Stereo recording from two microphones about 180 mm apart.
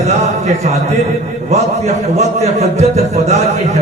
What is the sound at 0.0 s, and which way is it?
Speech, 40° right (ahead or behind).